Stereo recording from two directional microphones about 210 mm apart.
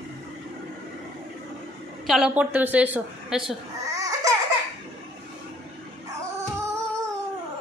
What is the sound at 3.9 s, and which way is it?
Laughter, 15° right (ahead or behind).